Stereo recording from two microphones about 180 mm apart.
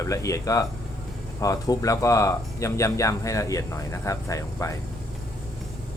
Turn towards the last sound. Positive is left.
turn(degrees=15)  # may be behind; listen again after turning